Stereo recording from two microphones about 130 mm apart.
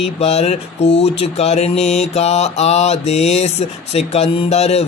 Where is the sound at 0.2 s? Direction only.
55° left (ahead or behind).